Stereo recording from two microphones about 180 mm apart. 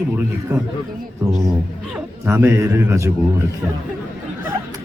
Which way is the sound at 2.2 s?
10° right (ahead or behind).